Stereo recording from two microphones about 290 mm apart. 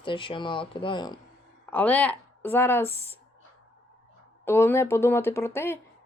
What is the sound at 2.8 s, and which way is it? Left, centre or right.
Speech, right.